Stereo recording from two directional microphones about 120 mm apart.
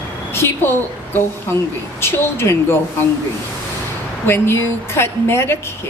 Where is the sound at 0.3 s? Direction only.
20° left (ahead or behind).